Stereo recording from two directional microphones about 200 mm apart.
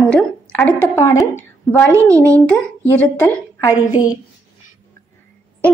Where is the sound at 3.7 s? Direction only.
10° right (ahead or behind).